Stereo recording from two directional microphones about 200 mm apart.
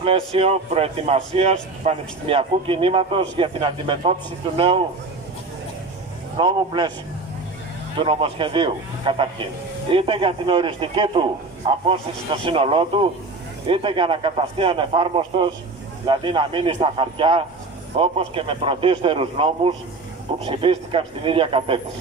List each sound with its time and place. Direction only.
0.0 s a man's voice: 30° right (ahead or behind)
6.3 s a man's voice: 25° right (ahead or behind)
8.0 s a man's voice: 25° right (ahead or behind)